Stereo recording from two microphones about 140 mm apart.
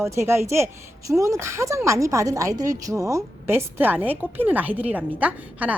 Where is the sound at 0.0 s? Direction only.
20° right (ahead or behind).